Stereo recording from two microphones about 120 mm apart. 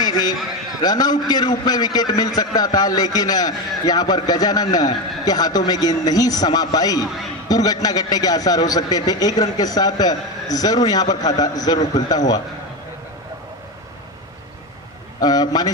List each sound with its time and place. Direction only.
0.0 s a sound: 35° left (ahead or behind)
0.8 s a man's voice: 35° left (ahead or behind)
15.1 s a man's voice: 35° left (ahead or behind)